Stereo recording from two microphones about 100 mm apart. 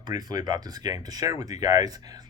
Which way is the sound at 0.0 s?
40° right (ahead or behind).